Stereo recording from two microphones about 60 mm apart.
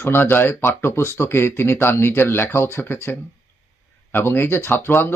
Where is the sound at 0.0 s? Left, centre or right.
Left.